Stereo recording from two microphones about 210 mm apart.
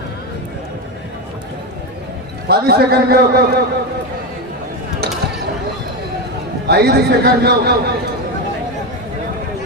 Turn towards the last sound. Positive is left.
turn(degrees=-50)  # may be behind; listen again after turning